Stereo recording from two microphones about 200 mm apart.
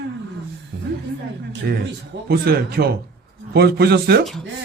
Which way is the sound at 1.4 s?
55° right (ahead or behind).